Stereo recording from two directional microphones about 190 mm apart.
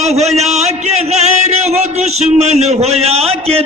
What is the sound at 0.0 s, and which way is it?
A man's voice, 35° right (ahead or behind).